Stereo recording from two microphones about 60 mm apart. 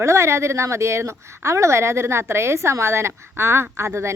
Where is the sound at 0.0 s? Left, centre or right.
Right.